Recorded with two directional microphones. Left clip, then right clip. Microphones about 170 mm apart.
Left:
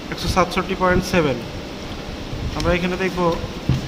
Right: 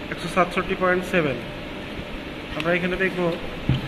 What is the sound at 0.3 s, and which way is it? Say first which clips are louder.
Speech: left 2 dB; 55° left (ahead or behind).